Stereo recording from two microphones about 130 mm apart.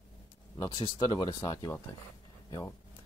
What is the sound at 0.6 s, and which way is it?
Speech, 35° left (ahead or behind).